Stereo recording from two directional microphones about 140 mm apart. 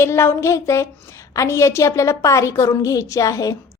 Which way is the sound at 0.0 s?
20° left (ahead or behind).